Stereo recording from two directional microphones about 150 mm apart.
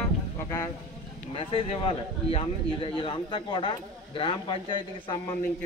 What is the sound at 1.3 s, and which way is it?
Speech, 40° left (ahead or behind).